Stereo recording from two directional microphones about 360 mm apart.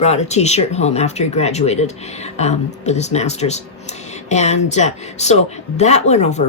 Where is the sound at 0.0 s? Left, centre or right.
Centre.